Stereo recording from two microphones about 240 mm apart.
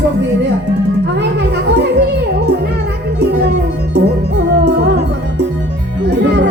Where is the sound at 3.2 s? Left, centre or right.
Right.